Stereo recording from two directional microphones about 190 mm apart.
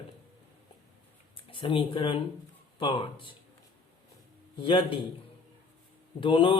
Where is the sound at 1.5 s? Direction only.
25° left (ahead or behind).